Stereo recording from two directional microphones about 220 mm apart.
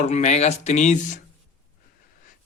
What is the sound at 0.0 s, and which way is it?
Speech, 30° left (ahead or behind).